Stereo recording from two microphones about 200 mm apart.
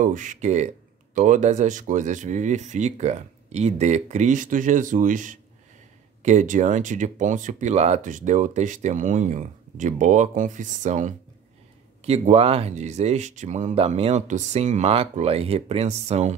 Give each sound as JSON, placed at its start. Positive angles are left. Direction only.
{"t": 0.0, "sound": "speech", "side_deg": -40}